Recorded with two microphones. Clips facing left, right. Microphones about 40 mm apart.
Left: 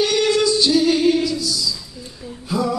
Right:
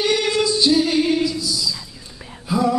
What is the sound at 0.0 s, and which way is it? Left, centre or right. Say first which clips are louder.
Female singing: left 2 dB; centre.